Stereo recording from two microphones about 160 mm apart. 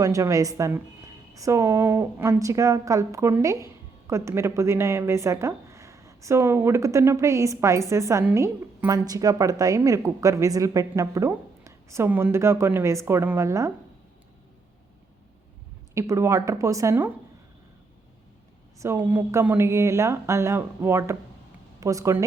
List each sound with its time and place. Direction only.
0.0 s a woman's voice: 20° right (ahead or behind)
16.0 s a woman's voice: 15° right (ahead or behind)
18.8 s speech: 15° right (ahead or behind)